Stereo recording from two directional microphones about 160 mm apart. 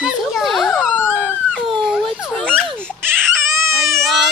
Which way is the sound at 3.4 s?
20° right (ahead or behind).